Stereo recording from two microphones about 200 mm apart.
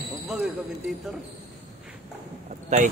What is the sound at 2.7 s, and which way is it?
Speech, 35° right (ahead or behind).